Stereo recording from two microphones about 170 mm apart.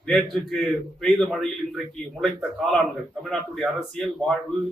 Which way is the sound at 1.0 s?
5° left (ahead or behind).